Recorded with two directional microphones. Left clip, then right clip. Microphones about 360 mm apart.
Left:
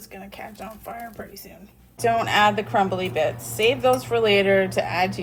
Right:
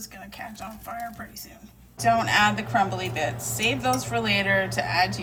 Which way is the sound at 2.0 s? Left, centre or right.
Centre.